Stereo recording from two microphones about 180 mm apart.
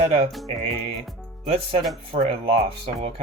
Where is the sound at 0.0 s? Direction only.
35° right (ahead or behind).